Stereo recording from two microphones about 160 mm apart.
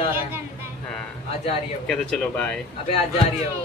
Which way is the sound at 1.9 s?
5° left (ahead or behind).